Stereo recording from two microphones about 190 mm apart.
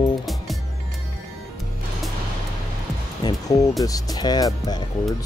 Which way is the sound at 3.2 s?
20° left (ahead or behind).